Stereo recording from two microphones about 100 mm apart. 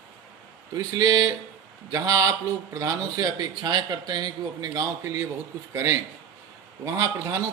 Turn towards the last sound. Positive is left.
turn(degrees=-30)  # may be behind; listen again after turning